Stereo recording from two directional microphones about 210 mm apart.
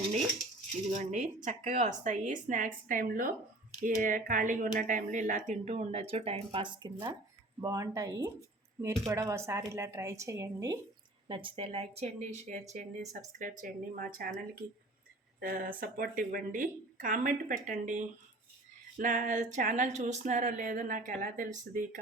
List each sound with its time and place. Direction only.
0.9 s speech: 35° right (ahead or behind)
15.8 s speech: 40° right (ahead or behind)